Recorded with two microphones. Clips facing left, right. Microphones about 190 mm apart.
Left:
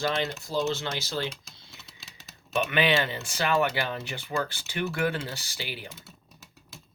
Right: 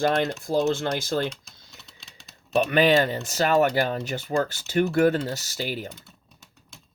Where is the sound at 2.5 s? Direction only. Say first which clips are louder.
Right 6 dB; 35° right (ahead or behind).